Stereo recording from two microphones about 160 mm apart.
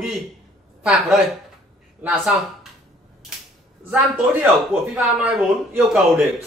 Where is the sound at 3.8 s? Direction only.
10° right (ahead or behind).